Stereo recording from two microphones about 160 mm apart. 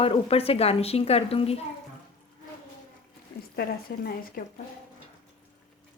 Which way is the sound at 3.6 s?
70° left (ahead or behind).